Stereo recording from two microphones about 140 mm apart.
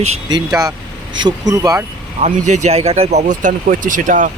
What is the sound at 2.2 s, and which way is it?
Speech, 55° right (ahead or behind).